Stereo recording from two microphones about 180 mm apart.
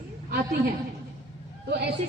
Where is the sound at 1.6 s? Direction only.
55° right (ahead or behind).